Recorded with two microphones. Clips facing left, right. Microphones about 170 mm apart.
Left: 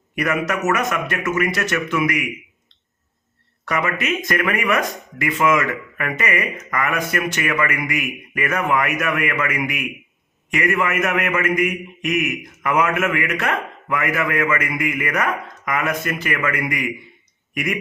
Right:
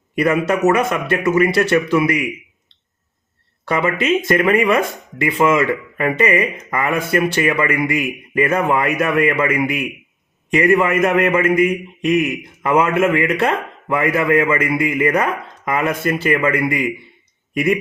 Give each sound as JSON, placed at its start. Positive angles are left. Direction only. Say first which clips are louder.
{"t": 0.2, "sound": "speech", "louder": "right 6 dB", "side_deg": -30}
{"t": 3.7, "sound": "a man's voice", "louder": "right 5 dB", "side_deg": -30}